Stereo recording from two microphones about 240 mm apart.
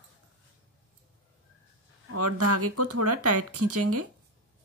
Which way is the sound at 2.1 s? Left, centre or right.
Right.